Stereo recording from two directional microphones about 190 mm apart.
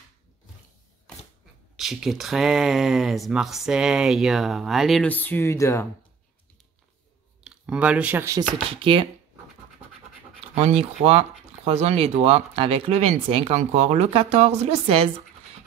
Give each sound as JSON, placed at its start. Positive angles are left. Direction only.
{"t": 1.8, "sound": "speech", "side_deg": 0}
{"t": 7.4, "sound": "speech", "side_deg": -5}
{"t": 8.6, "sound": "speech", "side_deg": -30}
{"t": 10.5, "sound": "speech", "side_deg": -35}